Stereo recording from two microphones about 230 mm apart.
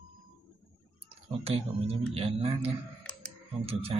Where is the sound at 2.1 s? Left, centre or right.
Right.